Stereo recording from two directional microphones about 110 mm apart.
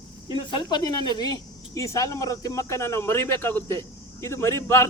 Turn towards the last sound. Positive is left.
turn(degrees=25)  # may be behind; listen again after turning